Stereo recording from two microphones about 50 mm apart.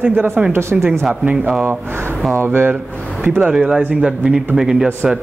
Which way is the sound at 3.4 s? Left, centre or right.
Centre.